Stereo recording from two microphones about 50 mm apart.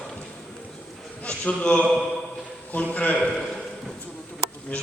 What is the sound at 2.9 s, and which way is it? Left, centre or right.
Speech, left.